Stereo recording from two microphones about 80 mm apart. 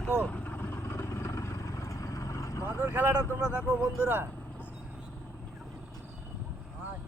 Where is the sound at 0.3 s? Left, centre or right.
Centre; by 2.6 s left.